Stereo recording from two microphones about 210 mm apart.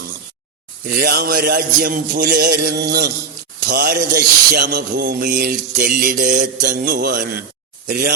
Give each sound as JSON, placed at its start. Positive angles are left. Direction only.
{"t": 1.0, "sound": "music", "side_deg": -45}